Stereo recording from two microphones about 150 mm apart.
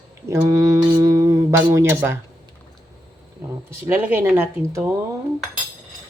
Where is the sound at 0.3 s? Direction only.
20° right (ahead or behind).